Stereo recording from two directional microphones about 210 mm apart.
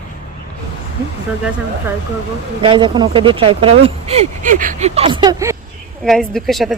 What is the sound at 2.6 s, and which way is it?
Speech, 25° right (ahead or behind).